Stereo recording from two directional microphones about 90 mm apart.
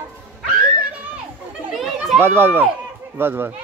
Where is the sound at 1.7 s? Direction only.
Centre (ahead or behind).